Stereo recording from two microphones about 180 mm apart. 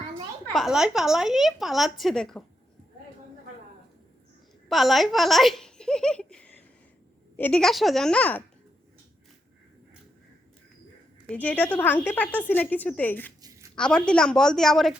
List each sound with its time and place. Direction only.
0.5 s a woman's voice: centre (ahead or behind)
4.7 s a woman's voice: centre (ahead or behind)
11.3 s a woman's voice: 10° left (ahead or behind)
13.4 s a sound: 20° right (ahead or behind)
13.7 s a woman's voice: 5° left (ahead or behind)